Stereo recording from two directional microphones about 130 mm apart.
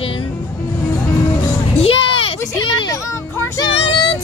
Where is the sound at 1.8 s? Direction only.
45° left (ahead or behind).